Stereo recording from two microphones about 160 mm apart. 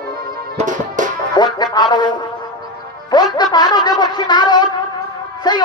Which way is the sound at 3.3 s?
25° left (ahead or behind).